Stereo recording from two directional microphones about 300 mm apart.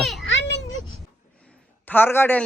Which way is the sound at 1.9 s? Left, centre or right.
Centre.